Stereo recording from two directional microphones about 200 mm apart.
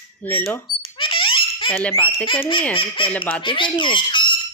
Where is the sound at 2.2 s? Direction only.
25° left (ahead or behind).